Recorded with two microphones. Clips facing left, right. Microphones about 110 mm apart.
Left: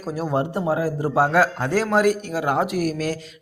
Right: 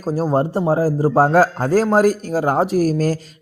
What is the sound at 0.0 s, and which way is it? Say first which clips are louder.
Speech: right 5 dB; 35° right (ahead or behind).